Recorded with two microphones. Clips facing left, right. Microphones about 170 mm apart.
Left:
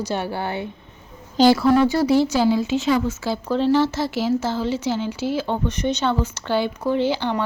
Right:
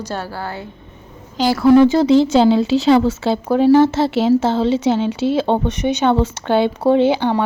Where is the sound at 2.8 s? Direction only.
85° right.